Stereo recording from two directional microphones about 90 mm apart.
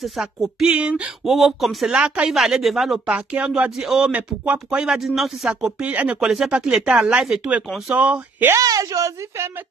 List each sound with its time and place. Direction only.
0.0 s speech: 5° right (ahead or behind)
1.3 s speech: centre (ahead or behind)
2.0 s speech: 10° right (ahead or behind)
3.1 s speech: 10° right (ahead or behind)
6.1 s speech: 5° right (ahead or behind)
8.5 s a woman's voice: 40° right (ahead or behind)